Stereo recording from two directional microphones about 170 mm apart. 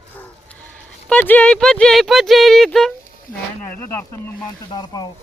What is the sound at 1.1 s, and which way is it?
Speech, 5° left (ahead or behind).